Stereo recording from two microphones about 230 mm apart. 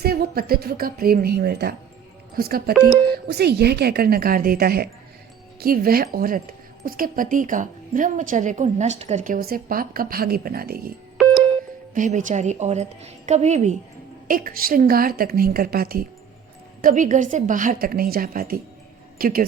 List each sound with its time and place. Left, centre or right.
0.0 s a woman's voice: right
11.9 s a woman's voice: right